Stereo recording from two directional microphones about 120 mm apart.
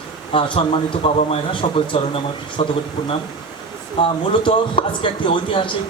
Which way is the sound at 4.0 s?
45° left (ahead or behind).